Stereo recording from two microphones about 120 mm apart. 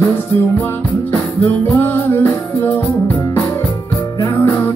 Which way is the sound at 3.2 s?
25° left (ahead or behind).